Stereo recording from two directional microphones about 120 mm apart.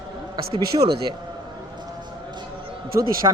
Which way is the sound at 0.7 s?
50° right (ahead or behind).